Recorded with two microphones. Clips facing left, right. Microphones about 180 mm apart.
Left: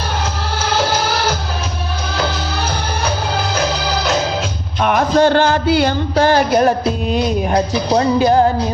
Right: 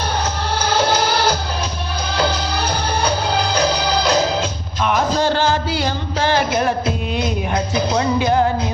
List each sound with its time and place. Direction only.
4.8 s music: 55° left (ahead or behind); by 8.4 s 40° left (ahead or behind)